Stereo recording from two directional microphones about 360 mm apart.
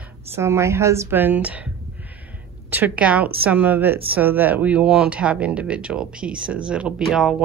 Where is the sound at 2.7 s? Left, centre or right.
Centre.